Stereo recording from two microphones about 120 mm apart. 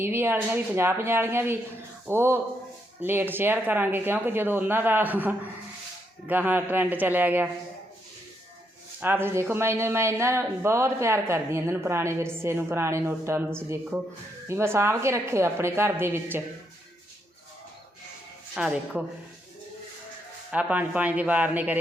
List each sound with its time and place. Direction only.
0.0 s speech: 20° right (ahead or behind)
9.0 s speech: 15° right (ahead or behind)
18.5 s speech: 5° right (ahead or behind)
20.5 s speech: 10° right (ahead or behind)